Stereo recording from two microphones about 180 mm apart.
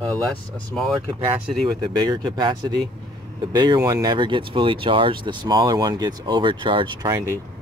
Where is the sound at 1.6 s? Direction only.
25° right (ahead or behind).